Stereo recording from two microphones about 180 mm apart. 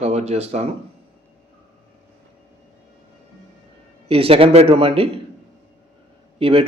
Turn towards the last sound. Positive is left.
turn(degrees=-30)  # may be behind; listen again after turning